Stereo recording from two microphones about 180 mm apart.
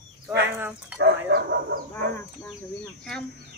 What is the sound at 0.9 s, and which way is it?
Speech, 65° right (ahead or behind).